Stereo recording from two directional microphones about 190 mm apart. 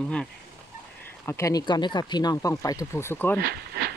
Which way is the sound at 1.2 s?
15° left (ahead or behind).